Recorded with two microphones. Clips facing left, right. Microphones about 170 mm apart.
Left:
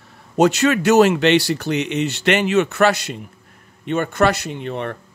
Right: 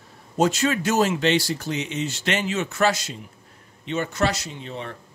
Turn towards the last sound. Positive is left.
turn(degrees=60)  # may be behind; listen again after turning